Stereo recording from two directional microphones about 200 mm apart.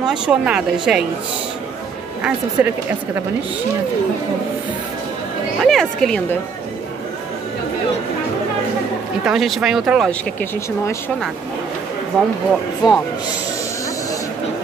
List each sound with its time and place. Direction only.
0.0 s a woman's voice: 5° right (ahead or behind)
2.2 s speech: 5° right (ahead or behind)
5.6 s a woman's voice: centre (ahead or behind)
9.2 s a woman's voice: centre (ahead or behind)
12.8 s speech: 20° left (ahead or behind)